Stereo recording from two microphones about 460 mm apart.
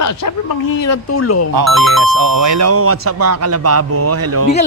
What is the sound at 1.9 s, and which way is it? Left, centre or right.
Speech, right.